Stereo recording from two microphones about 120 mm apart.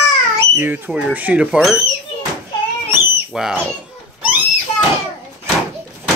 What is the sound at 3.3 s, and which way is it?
Speech, 5° right (ahead or behind).